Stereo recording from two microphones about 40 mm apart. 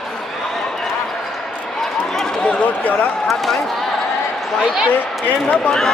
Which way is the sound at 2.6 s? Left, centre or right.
Left.